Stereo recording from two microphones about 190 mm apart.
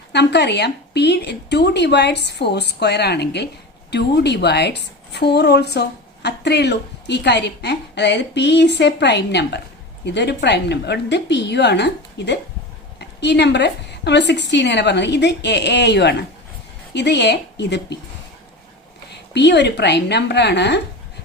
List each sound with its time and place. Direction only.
0.1 s a woman's voice: 60° left (ahead or behind)
19.3 s a woman's voice: 65° left (ahead or behind)